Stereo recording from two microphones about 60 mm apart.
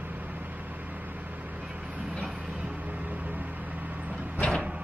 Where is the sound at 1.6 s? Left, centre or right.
Centre.